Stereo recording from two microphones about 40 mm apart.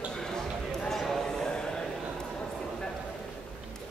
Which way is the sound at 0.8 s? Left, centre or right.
Centre.